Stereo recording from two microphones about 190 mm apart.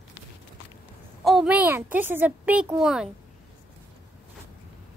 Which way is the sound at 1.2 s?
Centre (ahead or behind).